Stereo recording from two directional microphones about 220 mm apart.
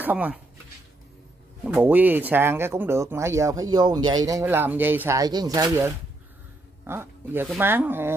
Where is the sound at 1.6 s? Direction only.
5° right (ahead or behind).